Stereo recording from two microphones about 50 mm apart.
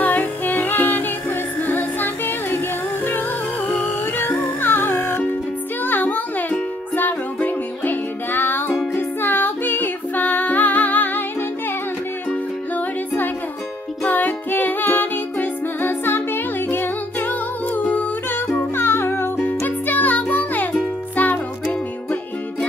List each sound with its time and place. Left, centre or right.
0.0 s music: left
3.7 s music: left
7.4 s music: left
12.7 s music: left
18.8 s music: left
19.3 s music: left